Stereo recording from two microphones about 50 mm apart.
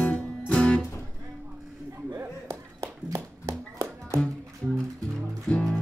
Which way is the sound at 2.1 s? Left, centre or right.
Right.